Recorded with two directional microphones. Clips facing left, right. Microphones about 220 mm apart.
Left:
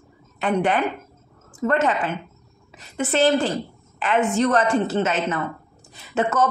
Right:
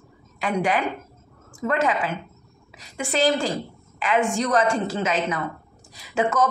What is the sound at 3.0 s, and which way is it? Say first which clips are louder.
A woman's voice: left 3 dB; 5° left (ahead or behind).